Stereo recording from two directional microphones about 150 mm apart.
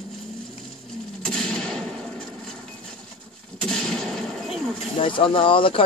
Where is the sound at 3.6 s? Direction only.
5° left (ahead or behind).